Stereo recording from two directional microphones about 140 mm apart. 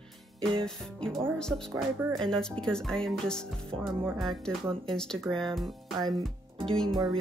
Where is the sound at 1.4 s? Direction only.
5° left (ahead or behind).